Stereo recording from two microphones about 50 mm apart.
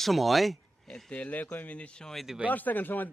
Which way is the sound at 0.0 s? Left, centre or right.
Centre.